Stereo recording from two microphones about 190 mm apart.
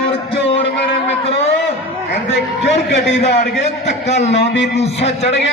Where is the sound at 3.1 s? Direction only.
35° left (ahead or behind).